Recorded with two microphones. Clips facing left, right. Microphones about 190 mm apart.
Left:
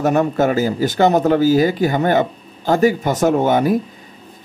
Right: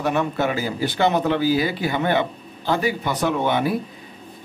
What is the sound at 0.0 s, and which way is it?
Speech, 45° left (ahead or behind).